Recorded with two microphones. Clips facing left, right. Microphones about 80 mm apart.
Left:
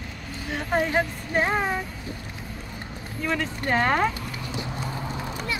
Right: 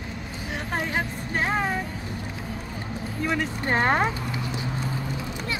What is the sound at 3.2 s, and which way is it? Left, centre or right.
Speech, centre.